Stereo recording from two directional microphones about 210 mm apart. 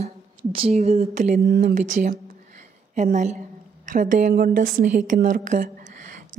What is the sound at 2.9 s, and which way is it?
A woman's voice, 35° right (ahead or behind).